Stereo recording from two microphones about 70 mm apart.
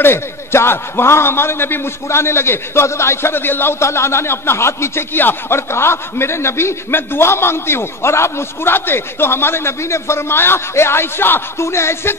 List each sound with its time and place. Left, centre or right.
0.0 s a man's voice: left